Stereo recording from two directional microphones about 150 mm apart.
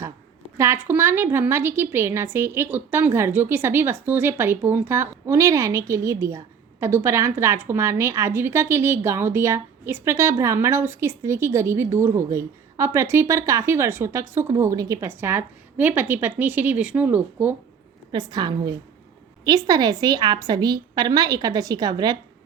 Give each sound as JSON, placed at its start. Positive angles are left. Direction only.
{"t": 0.5, "sound": "a woman's voice", "side_deg": -20}
{"t": 18.1, "sound": "a woman's voice", "side_deg": -30}